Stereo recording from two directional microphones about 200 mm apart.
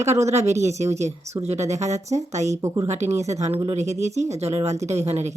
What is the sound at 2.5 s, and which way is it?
Speech, 15° right (ahead or behind).